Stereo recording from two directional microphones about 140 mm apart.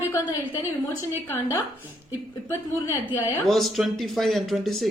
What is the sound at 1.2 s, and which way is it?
Speech, 20° left (ahead or behind).